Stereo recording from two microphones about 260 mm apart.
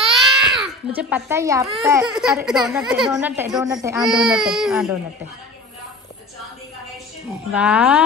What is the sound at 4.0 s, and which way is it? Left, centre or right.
Speech, centre.